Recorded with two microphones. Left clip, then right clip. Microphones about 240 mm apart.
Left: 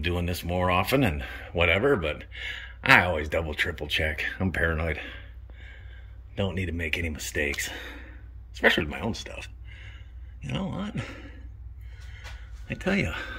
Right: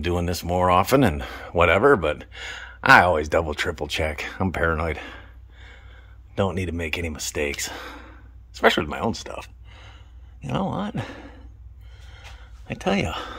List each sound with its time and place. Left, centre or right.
0.0 s speech: centre
9.4 s a sound: right
10.5 s speech: right
12.6 s speech: centre